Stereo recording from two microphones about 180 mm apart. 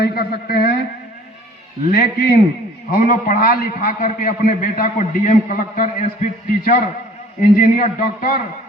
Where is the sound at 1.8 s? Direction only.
55° left (ahead or behind).